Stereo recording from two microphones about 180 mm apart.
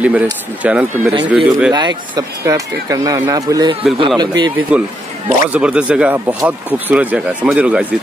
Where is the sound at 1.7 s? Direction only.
25° right (ahead or behind).